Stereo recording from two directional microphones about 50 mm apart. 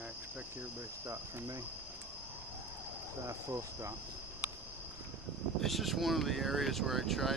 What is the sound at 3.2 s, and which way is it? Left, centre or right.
Cricket, right.